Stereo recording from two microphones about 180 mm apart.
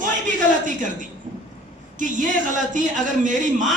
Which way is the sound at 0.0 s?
45° right (ahead or behind).